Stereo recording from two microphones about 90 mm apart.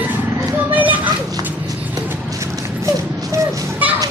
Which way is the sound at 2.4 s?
35° right (ahead or behind).